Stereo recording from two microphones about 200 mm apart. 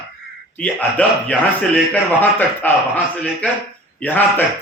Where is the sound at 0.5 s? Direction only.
10° left (ahead or behind).